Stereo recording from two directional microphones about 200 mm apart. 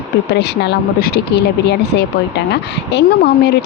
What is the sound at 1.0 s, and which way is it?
A woman's voice, 55° left (ahead or behind).